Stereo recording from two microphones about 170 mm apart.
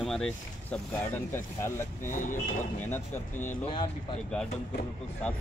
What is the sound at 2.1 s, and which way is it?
Speech, 50° left (ahead or behind).